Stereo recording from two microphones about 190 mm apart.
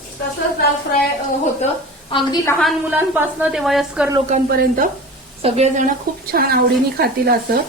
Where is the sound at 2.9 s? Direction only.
10° right (ahead or behind).